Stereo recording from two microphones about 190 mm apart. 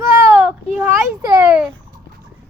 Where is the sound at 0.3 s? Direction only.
5° right (ahead or behind).